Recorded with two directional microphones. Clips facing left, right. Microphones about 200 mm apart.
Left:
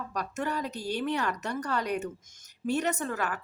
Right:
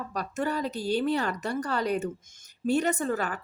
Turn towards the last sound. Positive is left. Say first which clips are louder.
# right 3 dB
turn(degrees=-30)  # may be behind; listen again after turning